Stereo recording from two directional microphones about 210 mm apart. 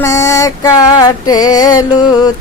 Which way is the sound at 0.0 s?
15° left (ahead or behind).